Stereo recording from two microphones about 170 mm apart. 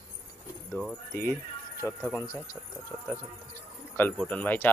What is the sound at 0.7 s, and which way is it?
Speech, 5° left (ahead or behind).